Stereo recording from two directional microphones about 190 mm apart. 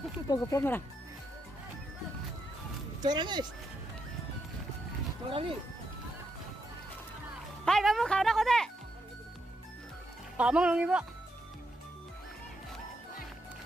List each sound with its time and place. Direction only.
0.3 s speech: 15° left (ahead or behind)
3.0 s speech: 20° right (ahead or behind)
5.3 s speech: 30° right (ahead or behind)
7.6 s speech: centre (ahead or behind)
10.3 s speech: 5° right (ahead or behind)